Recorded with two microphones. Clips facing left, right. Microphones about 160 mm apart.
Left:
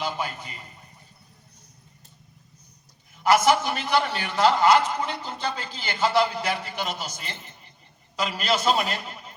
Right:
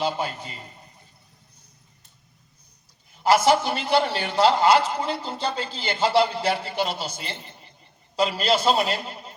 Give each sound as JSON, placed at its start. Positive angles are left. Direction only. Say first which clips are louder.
{"t": 0.0, "sound": "a man's voice", "louder": "right 4 dB", "side_deg": -30}
{"t": 3.2, "sound": "a man's voice", "louder": "right 1 dB", "side_deg": -30}